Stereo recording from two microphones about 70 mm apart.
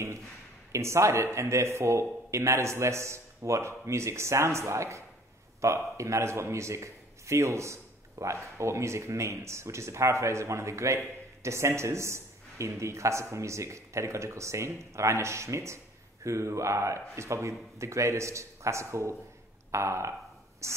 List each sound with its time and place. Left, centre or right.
0.7 s a man's voice: right